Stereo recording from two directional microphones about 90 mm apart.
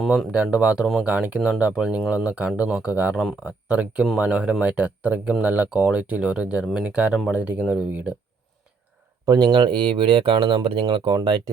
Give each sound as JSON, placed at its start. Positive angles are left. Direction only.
{"t": 0.0, "sound": "speech", "side_deg": 5}
{"t": 0.4, "sound": "speech", "side_deg": -10}
{"t": 2.9, "sound": "speech", "side_deg": -15}
{"t": 9.2, "sound": "speech", "side_deg": -50}